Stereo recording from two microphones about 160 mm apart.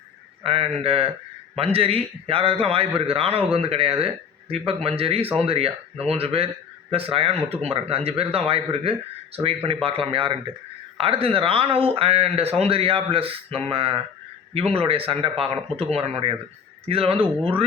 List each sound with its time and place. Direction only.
0.4 s a man's voice: 35° right (ahead or behind)